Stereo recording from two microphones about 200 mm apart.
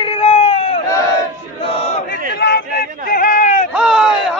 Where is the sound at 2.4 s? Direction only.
50° left (ahead or behind).